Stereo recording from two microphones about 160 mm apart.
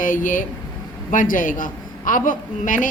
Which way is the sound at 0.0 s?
55° left (ahead or behind).